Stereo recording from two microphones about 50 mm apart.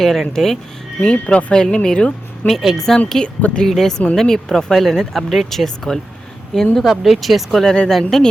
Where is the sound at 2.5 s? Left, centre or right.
Centre.